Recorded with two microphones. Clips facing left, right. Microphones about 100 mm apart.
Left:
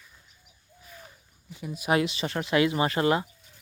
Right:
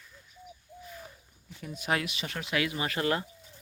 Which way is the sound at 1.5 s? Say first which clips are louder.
Left 5 dB; 10° left (ahead or behind).